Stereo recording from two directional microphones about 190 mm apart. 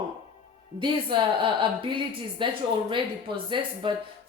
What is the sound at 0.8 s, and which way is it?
Speech, 25° right (ahead or behind).